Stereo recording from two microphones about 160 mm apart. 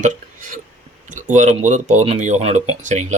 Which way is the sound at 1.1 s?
50° right (ahead or behind).